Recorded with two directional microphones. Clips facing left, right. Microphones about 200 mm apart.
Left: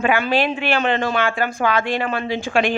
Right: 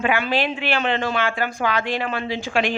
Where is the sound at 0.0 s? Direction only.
45° left (ahead or behind).